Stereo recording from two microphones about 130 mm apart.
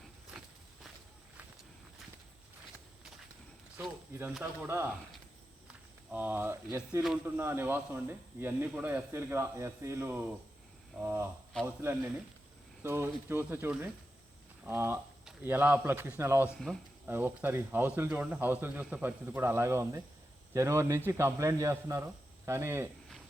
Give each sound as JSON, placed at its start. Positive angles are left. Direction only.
{"t": 4.1, "sound": "speech", "side_deg": -15}
{"t": 6.1, "sound": "speech", "side_deg": -15}
{"t": 16.6, "sound": "speech", "side_deg": 5}
{"t": 17.1, "sound": "speech", "side_deg": -15}